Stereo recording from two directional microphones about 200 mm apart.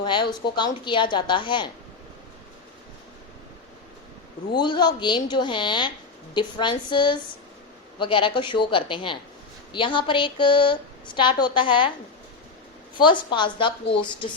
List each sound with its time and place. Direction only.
0.0 s a woman's voice: 25° left (ahead or behind)
4.5 s a woman's voice: 20° left (ahead or behind)
13.0 s a woman's voice: 25° left (ahead or behind)